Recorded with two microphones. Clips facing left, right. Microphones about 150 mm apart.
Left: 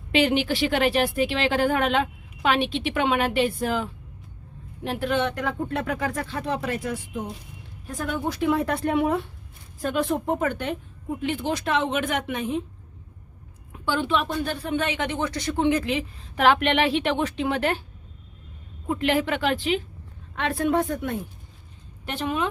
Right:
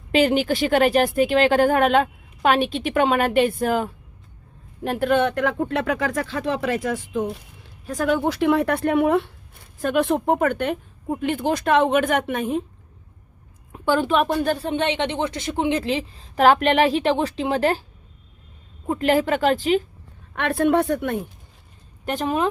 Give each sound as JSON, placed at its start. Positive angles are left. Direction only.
{"t": 0.1, "sound": "a woman's voice", "side_deg": -45}
{"t": 13.7, "sound": "a woman's voice", "side_deg": -45}
{"t": 14.4, "sound": "speech", "side_deg": -35}
{"t": 15.8, "sound": "a woman's voice", "side_deg": -30}
{"t": 18.9, "sound": "a woman's voice", "side_deg": -40}
{"t": 20.3, "sound": "a woman's voice", "side_deg": -60}
{"t": 22.0, "sound": "speech", "side_deg": -40}